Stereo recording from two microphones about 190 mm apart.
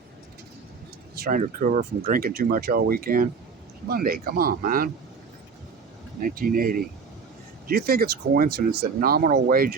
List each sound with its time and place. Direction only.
1.1 s speech: 50° right (ahead or behind)
6.1 s speech: 45° right (ahead or behind)